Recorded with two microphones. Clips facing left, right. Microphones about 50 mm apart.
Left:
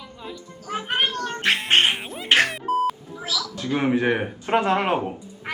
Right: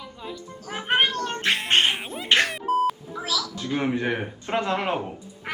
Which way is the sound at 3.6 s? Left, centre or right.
Left.